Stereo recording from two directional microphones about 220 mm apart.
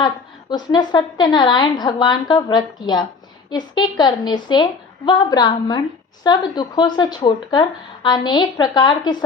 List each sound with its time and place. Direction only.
0.5 s speech: 20° left (ahead or behind)